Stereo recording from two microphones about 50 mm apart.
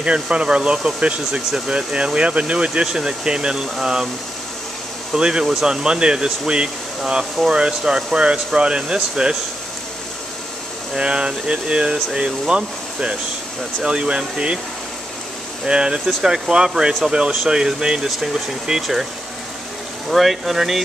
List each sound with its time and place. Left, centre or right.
0.0 s speech: right
5.1 s speech: centre
11.0 s speech: centre
15.6 s speech: centre
20.1 s speech: centre